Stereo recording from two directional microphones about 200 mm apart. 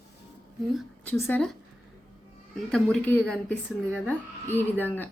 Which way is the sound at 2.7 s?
5° left (ahead or behind).